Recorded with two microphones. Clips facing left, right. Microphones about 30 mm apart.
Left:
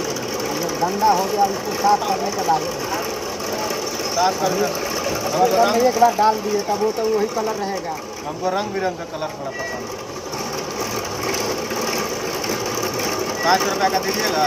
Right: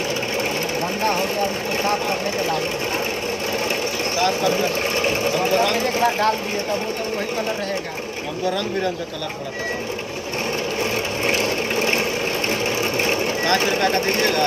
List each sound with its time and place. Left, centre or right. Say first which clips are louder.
0.4 s speech: left 1 dB; right
4.2 s speech: left 2 dB; right
10.8 s vehicle: right 2 dB; right
13.4 s speech: left 4 dB; right